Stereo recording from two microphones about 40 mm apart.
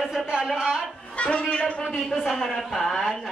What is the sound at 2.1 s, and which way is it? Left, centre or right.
Speech, centre.